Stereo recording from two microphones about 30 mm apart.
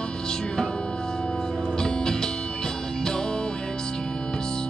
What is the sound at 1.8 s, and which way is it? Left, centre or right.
Music, left.